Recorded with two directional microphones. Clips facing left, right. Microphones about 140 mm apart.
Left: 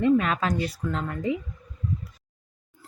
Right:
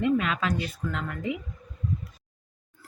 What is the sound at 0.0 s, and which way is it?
Speech, 40° left (ahead or behind).